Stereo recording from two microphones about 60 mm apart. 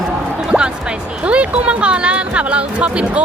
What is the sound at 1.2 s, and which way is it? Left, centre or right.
Speech, right.